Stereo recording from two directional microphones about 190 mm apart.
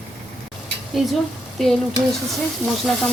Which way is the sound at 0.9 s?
Centre (ahead or behind).